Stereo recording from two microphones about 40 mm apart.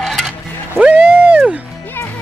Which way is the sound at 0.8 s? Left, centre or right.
Right.